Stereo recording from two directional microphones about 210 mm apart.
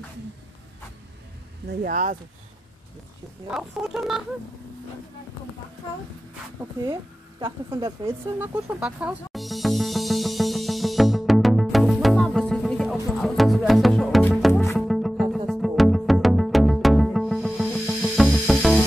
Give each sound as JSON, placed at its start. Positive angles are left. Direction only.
{"t": 1.7, "sound": "speech", "side_deg": -45}
{"t": 3.4, "sound": "speech", "side_deg": 0}
{"t": 8.0, "sound": "music", "side_deg": -10}
{"t": 14.5, "sound": "music", "side_deg": 10}
{"t": 14.8, "sound": "music", "side_deg": 0}